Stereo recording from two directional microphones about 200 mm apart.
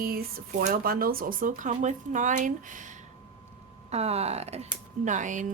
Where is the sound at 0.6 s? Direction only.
45° right (ahead or behind).